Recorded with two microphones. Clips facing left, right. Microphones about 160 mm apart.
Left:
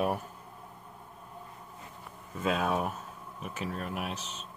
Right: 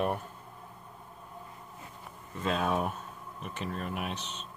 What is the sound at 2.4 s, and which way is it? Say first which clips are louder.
Speech: even; 5° left (ahead or behind).